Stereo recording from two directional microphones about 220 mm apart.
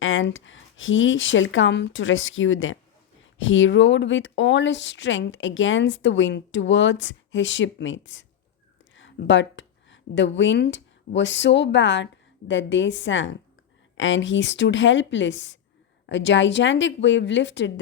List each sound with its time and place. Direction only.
0.0 s speech: 60° left (ahead or behind)